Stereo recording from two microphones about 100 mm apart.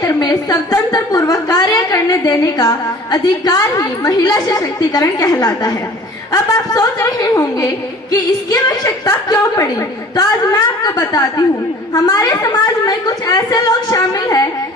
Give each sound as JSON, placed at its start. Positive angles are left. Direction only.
{"t": 0.0, "sound": "a woman's voice", "side_deg": 40}